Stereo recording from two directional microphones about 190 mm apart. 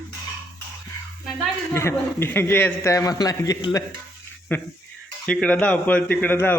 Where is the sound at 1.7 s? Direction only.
10° left (ahead or behind).